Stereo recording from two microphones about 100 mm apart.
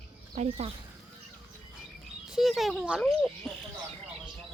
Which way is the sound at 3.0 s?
5° left (ahead or behind).